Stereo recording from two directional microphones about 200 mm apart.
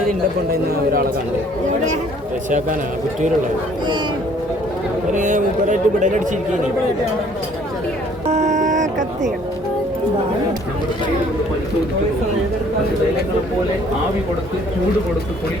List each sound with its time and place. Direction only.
2.5 s speech: 40° right (ahead or behind)
5.1 s speech: 40° right (ahead or behind)
8.3 s a sound: 35° right (ahead or behind)